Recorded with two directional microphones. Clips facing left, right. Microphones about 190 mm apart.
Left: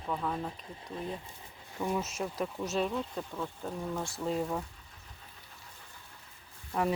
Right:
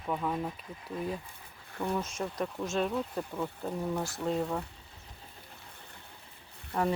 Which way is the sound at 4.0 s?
Centre (ahead or behind).